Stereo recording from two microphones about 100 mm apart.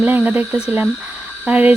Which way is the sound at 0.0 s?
15° right (ahead or behind).